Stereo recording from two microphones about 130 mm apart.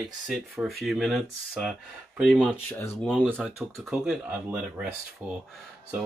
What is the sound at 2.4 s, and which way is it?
Speech, 15° left (ahead or behind).